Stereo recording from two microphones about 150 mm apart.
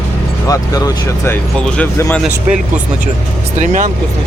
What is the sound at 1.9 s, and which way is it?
Speech, 15° left (ahead or behind).